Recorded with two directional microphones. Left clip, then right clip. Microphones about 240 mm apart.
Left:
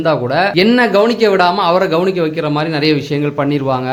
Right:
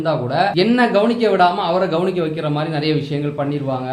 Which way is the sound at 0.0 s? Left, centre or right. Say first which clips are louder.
Left 4 dB; left.